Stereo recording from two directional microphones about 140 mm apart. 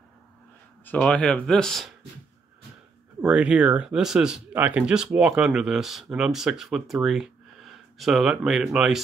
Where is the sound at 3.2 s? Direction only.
5° right (ahead or behind).